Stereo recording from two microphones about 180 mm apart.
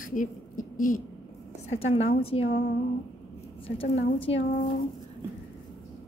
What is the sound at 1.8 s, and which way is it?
Speech, 35° left (ahead or behind).